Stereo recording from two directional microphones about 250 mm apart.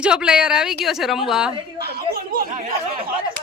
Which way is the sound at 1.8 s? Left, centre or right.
Right.